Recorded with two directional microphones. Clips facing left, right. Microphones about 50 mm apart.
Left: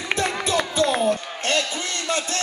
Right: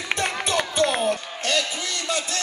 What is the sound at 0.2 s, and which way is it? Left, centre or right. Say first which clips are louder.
Music: left 2 dB; right.